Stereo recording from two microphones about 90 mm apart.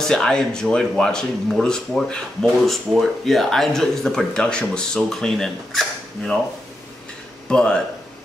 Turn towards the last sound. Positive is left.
turn(degrees=10)  # may be behind; listen again after turning